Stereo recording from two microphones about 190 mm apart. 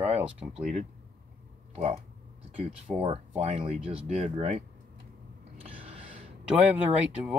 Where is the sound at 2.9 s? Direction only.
30° right (ahead or behind).